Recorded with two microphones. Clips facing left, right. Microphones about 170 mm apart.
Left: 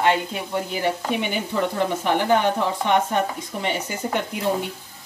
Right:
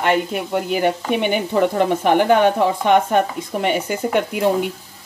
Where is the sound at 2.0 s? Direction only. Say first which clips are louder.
Right 5 dB; 55° right (ahead or behind).